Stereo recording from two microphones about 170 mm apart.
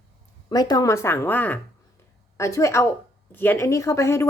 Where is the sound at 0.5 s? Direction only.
25° left (ahead or behind).